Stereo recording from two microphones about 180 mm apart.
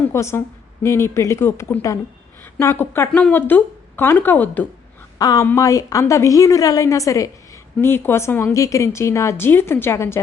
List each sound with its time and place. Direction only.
0.1 s speech: 15° left (ahead or behind)
5.1 s speech: 20° left (ahead or behind)